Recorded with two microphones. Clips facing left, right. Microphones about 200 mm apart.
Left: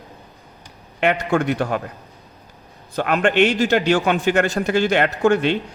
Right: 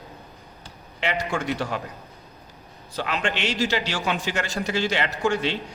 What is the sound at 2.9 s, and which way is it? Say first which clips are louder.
A man's voice: left 9 dB; 55° left (ahead or behind).